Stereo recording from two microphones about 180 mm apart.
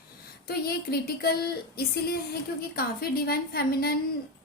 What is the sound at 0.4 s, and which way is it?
Speech, 60° left (ahead or behind).